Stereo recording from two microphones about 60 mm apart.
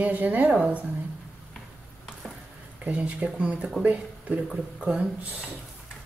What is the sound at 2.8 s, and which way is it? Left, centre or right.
A woman's voice, right.